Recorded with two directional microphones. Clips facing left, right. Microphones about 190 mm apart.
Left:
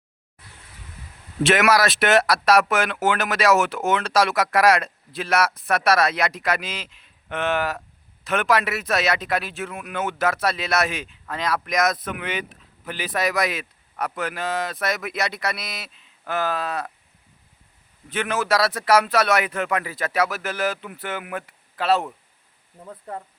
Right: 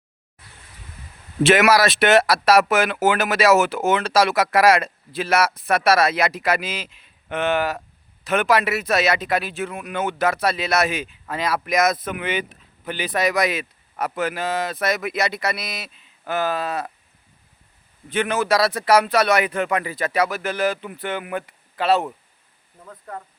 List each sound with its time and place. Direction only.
1.5 s speech: centre (ahead or behind)
18.1 s speech: centre (ahead or behind)
22.8 s speech: 25° left (ahead or behind)